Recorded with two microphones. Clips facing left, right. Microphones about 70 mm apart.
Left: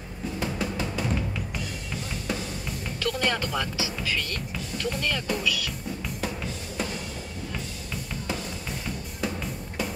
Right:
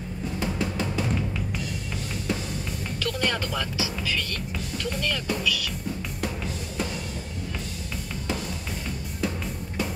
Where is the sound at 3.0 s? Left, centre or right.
Centre.